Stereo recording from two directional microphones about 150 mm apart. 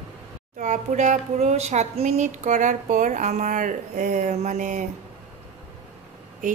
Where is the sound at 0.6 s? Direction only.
55° right (ahead or behind).